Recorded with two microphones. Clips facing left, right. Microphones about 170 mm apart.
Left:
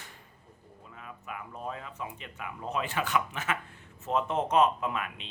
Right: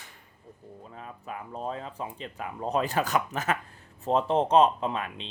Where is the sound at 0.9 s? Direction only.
35° right (ahead or behind).